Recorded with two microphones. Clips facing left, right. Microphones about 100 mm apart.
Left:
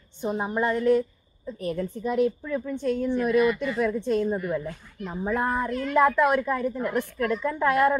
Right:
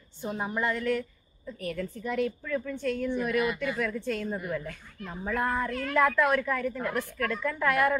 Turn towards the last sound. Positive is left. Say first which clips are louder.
# left 4 dB
turn(degrees=25)  # may be behind; listen again after turning